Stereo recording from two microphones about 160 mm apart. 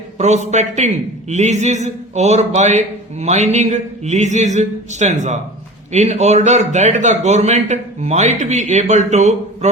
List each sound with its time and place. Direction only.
0.2 s a man's voice: 45° right (ahead or behind)